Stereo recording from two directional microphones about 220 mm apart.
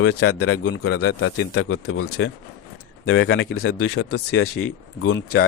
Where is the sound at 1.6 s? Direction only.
75° left (ahead or behind).